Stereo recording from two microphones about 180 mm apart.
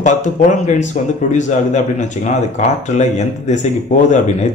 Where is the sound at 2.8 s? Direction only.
40° left (ahead or behind).